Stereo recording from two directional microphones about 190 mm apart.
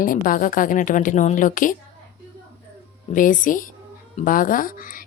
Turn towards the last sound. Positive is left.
turn(degrees=45)  # may be behind; listen again after turning